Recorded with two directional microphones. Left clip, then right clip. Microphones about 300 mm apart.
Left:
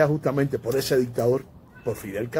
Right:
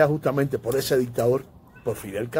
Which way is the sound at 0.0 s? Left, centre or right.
Centre.